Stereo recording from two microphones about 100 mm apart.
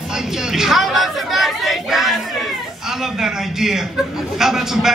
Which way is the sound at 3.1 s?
5° right (ahead or behind).